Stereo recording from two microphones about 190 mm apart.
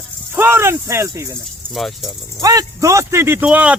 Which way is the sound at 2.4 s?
20° right (ahead or behind).